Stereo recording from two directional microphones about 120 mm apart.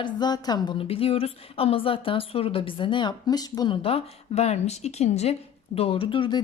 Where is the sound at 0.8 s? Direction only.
55° left (ahead or behind); by 3.8 s 35° left (ahead or behind).